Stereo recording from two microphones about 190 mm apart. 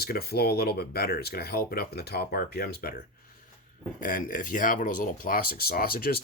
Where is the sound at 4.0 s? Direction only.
45° left (ahead or behind).